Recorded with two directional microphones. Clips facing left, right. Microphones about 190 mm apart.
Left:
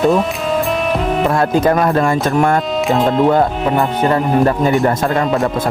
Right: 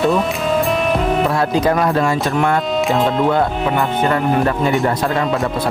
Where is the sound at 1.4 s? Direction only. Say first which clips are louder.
Left 2 dB; 50° left (ahead or behind).